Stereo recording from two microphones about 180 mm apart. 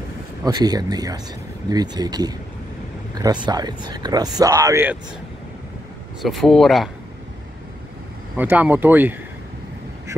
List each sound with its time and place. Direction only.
0.4 s speech: 20° right (ahead or behind)
3.4 s speech: 25° right (ahead or behind)
6.2 s speech: centre (ahead or behind)
8.4 s speech: 10° right (ahead or behind)